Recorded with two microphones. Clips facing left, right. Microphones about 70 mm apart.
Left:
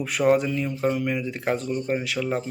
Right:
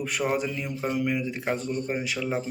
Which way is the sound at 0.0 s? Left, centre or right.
Centre.